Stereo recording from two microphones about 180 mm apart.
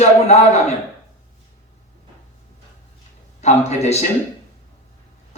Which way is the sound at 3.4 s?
40° left (ahead or behind).